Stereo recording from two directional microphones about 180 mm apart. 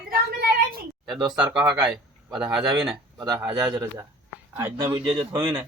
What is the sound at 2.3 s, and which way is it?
Speech, 5° right (ahead or behind).